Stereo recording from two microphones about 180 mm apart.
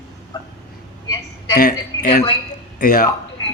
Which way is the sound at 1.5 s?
55° left (ahead or behind).